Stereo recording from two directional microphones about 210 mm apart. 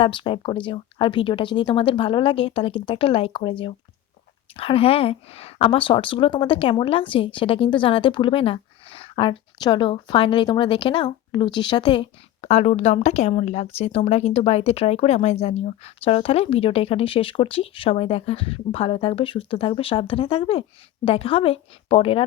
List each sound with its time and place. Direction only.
0.0 s speech: 25° left (ahead or behind)
4.5 s speech: 25° left (ahead or behind)